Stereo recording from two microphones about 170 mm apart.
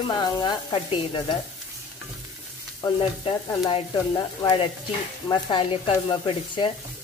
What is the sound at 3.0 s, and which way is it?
Speech, 30° left (ahead or behind).